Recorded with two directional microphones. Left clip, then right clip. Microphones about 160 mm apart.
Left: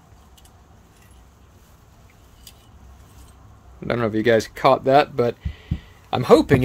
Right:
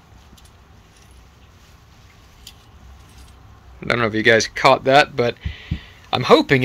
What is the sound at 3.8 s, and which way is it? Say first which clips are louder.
Speech: right 3 dB; 25° left (ahead or behind).